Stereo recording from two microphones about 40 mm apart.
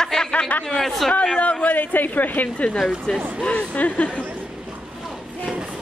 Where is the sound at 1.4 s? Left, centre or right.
Left.